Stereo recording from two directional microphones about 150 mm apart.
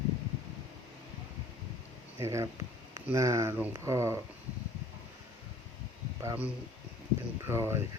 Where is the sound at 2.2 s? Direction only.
20° right (ahead or behind).